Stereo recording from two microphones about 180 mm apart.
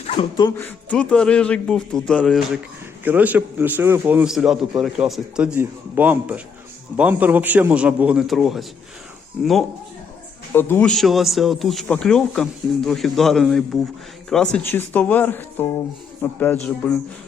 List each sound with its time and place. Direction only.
0.0 s speech: 35° left (ahead or behind)
0.5 s speech: 10° left (ahead or behind)
3.0 s a man's voice: 10° right (ahead or behind)
10.5 s speech: 10° left (ahead or behind)